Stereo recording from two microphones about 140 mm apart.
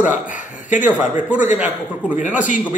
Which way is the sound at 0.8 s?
10° right (ahead or behind).